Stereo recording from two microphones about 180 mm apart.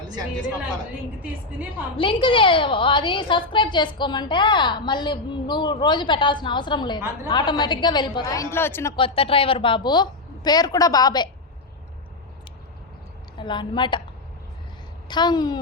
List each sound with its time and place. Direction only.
2.0 s a woman's voice: 30° left (ahead or behind)
9.0 s a woman's voice: 30° left (ahead or behind)
13.4 s a woman's voice: 25° left (ahead or behind)
15.0 s a woman's voice: 25° left (ahead or behind)